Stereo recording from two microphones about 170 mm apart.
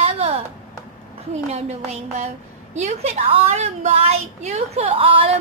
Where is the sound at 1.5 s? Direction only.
40° right (ahead or behind).